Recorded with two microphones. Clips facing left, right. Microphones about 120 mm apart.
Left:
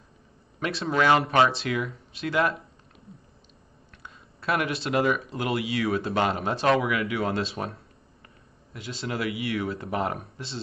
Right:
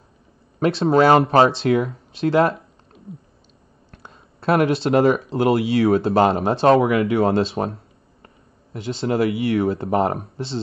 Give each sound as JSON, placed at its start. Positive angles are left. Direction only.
{"t": 0.6, "sound": "speech", "side_deg": -30}
{"t": 3.9, "sound": "a sound", "side_deg": -30}
{"t": 5.3, "sound": "speech", "side_deg": -35}